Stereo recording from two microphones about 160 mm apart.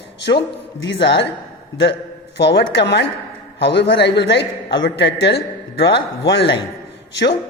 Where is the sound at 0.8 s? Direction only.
90° left.